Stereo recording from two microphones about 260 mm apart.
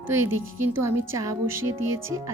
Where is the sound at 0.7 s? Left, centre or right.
Centre.